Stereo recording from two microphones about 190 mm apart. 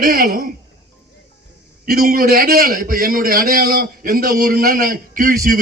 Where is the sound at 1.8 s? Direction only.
50° right (ahead or behind).